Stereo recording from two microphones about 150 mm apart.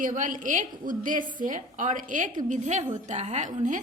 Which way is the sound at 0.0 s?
60° right (ahead or behind).